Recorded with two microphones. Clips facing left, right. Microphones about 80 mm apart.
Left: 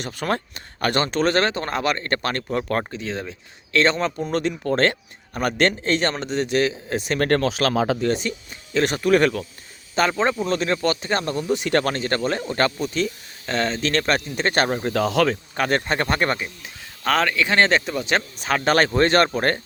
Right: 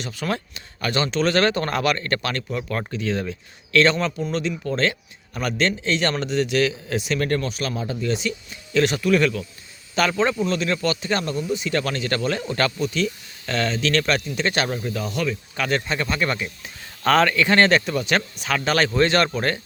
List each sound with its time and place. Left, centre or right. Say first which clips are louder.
0.0 s speech: left 2 dB; left
1.0 s speech: right 2 dB; left
1.5 s speech: right 2 dB; left
2.9 s speech: right 4 dB; left
6.1 s speech: right 1 dB; left
8.0 s speech: left 2 dB; left
9.9 s speech: even; left
11.3 s speech: left 3 dB; left
14.8 s speech: left 6 dB; left
15.5 s speech: left 1 dB; left
16.6 s speech: right 3 dB; centre; by 18.2 s left
18.3 s speech: left 5 dB; left